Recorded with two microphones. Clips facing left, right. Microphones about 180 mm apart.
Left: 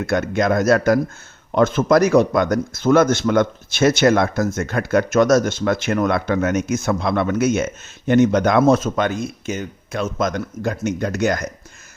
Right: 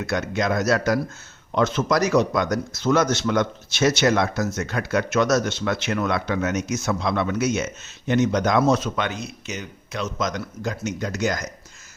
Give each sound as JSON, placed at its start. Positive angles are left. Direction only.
{"t": 0.0, "sound": "speech", "side_deg": 50}